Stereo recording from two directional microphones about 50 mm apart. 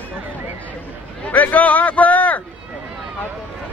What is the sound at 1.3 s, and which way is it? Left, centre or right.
A man's voice, left.